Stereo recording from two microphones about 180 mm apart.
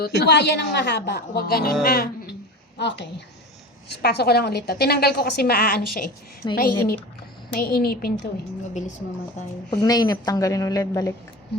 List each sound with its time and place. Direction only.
0.0 s a woman's voice: 70° left (ahead or behind)
2.7 s a woman's voice: 70° left (ahead or behind)
9.7 s a woman's voice: 20° left (ahead or behind)